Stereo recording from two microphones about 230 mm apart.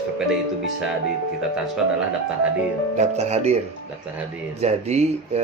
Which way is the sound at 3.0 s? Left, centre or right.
Right.